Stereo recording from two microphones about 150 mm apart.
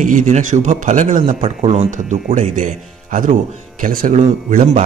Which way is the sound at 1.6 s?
40° right (ahead or behind).